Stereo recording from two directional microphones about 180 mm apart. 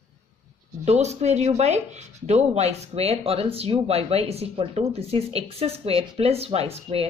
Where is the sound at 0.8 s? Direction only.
40° right (ahead or behind).